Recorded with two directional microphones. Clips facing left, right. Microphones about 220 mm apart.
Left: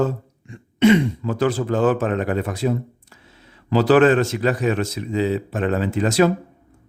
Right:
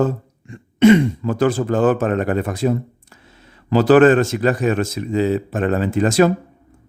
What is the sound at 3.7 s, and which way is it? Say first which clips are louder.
A man's voice: right 3 dB; 45° right (ahead or behind).